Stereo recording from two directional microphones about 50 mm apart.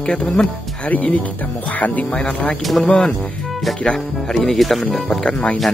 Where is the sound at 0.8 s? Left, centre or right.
Left.